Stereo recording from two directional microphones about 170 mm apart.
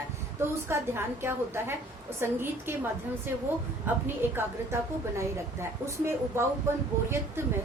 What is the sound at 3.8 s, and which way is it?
Speech, 15° right (ahead or behind).